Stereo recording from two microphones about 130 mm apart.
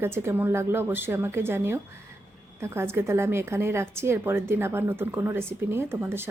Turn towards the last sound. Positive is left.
turn(degrees=-20)  # may be behind; listen again after turning